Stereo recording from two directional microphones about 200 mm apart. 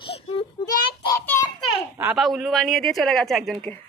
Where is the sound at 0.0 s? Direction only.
25° left (ahead or behind); by 1.5 s 10° left (ahead or behind).